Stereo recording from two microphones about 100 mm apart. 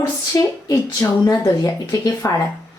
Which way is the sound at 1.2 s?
40° left (ahead or behind).